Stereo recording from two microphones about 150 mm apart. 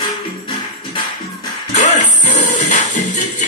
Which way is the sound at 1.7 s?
55° left (ahead or behind).